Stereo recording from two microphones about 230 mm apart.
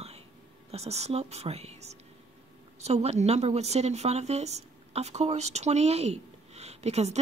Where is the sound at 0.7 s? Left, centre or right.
Right.